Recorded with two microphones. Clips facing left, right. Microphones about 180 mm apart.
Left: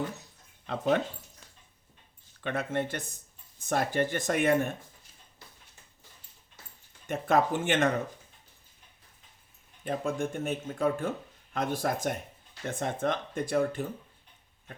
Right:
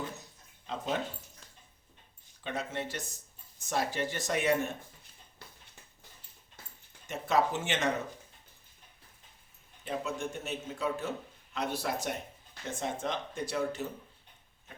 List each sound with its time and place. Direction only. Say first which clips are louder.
0.7 s speech: left 4 dB; 60° left (ahead or behind)
2.4 s speech: left 5 dB; 55° left (ahead or behind)
7.1 s speech: left 3 dB; 55° left (ahead or behind)
9.8 s speech: left 4 dB; 50° left (ahead or behind)